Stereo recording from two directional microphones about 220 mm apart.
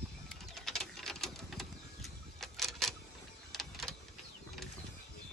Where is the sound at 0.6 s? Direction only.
Centre (ahead or behind).